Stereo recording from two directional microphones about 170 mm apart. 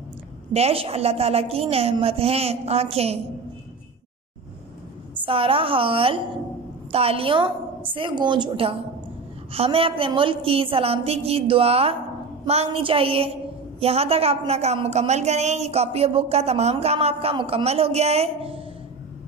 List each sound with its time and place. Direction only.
0.5 s a woman's voice: 35° right (ahead or behind)
5.2 s a woman's voice: 30° right (ahead or behind)